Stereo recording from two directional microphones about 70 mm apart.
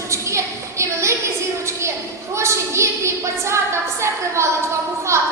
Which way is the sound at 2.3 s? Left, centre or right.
Right.